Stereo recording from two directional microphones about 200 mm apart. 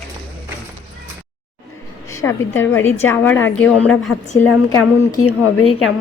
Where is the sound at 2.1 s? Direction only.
15° left (ahead or behind).